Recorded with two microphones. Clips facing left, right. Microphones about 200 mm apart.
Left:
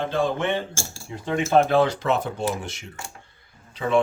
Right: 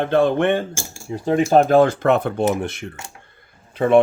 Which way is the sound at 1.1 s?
40° right (ahead or behind).